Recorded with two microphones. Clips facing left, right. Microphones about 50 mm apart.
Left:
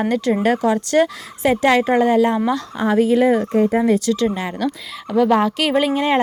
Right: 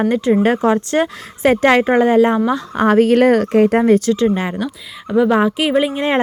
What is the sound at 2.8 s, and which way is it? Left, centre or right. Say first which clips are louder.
Speech: right 4 dB; right.